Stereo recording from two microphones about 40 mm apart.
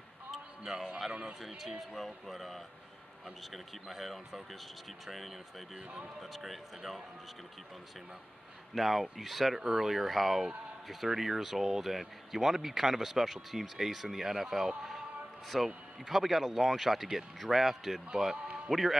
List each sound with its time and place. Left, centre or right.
0.3 s music: centre
1.8 s speech: centre
5.8 s speech: right
6.2 s speech: centre
8.7 s speech: centre